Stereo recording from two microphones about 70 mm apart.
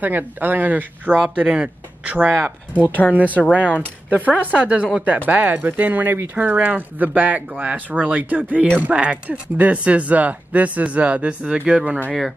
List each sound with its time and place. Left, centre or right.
0.0 s speech: right